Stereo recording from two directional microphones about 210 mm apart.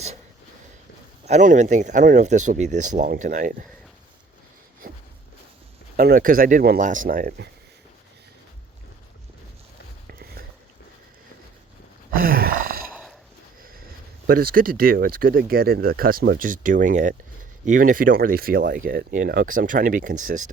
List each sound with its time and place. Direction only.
1.2 s speech: 35° right (ahead or behind)
4.8 s a sound: 45° right (ahead or behind)
6.0 s speech: 40° right (ahead or behind)
10.1 s a sound: 45° right (ahead or behind)
12.1 s groan: 45° right (ahead or behind)
12.9 s horse: 5° right (ahead or behind)
14.3 s speech: 45° right (ahead or behind)